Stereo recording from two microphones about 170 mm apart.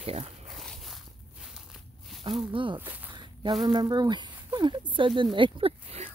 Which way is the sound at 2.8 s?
10° right (ahead or behind).